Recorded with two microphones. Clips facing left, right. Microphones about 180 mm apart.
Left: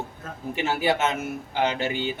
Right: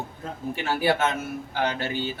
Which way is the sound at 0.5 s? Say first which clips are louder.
Even; 15° left (ahead or behind).